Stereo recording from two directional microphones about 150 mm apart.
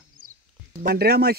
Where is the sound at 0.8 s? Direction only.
90° right.